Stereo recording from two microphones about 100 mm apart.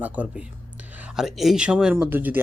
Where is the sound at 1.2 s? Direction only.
Centre (ahead or behind).